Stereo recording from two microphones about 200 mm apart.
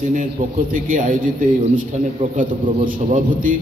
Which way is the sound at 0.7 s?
40° right (ahead or behind).